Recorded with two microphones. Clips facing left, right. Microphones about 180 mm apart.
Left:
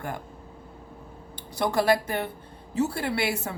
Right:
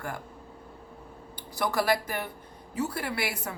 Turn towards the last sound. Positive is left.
turn(degrees=25)  # may be behind; listen again after turning